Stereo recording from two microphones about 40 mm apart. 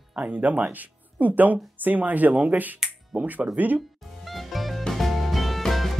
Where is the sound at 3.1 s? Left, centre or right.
Right.